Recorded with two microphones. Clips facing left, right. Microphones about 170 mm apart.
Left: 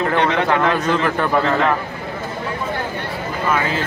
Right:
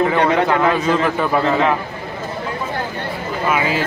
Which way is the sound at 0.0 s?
5° right (ahead or behind).